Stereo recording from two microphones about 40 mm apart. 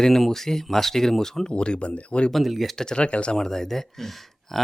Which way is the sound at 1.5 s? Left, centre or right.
Left.